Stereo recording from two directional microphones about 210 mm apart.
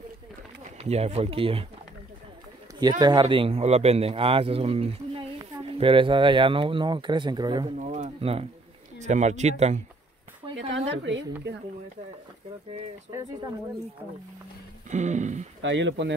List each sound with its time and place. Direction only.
0.7 s speech: 30° right (ahead or behind)
2.8 s a man's voice: 20° right (ahead or behind)
7.7 s speech: 35° right (ahead or behind)
10.7 s a woman's voice: 60° right (ahead or behind)
13.1 s speech: 20° right (ahead or behind)
14.9 s speech: 35° right (ahead or behind)
15.6 s speech: 60° right (ahead or behind)